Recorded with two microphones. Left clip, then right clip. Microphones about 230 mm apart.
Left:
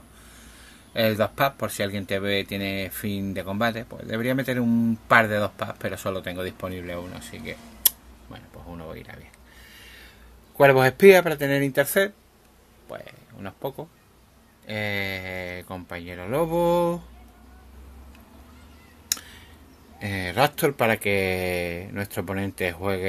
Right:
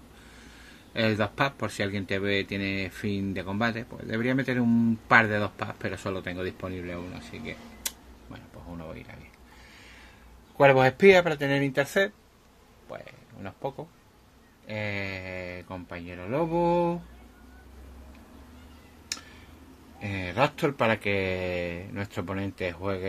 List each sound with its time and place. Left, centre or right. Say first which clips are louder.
0.9 s speech: left 4 dB; centre
7.4 s a sound: left 8 dB; left
10.6 s speech: left 3 dB; centre
20.0 s speech: left 4 dB; left